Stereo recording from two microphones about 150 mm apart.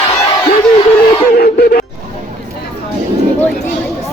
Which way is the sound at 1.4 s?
80° left.